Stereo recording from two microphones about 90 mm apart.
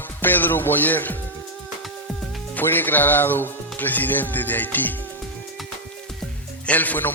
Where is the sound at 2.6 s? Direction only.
20° left (ahead or behind).